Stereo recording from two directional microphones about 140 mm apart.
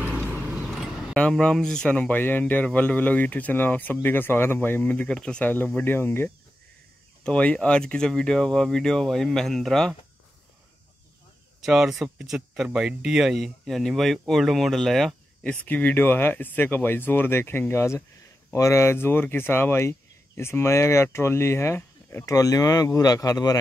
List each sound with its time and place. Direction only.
0.3 s horse: 10° right (ahead or behind)
0.7 s a sound: centre (ahead or behind)
1.1 s speech: 5° left (ahead or behind)
11.6 s speech: centre (ahead or behind)
15.6 s speech: 10° left (ahead or behind)